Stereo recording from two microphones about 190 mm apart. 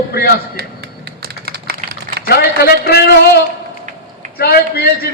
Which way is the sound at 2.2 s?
55° left (ahead or behind).